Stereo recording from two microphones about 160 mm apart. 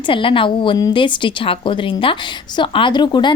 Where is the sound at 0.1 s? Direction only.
35° left (ahead or behind).